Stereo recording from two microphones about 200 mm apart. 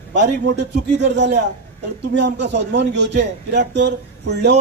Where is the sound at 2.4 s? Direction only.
60° right (ahead or behind).